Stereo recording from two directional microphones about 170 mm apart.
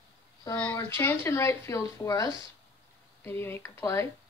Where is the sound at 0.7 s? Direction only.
20° left (ahead or behind).